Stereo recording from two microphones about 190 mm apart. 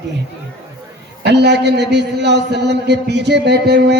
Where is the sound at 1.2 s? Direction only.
60° right (ahead or behind).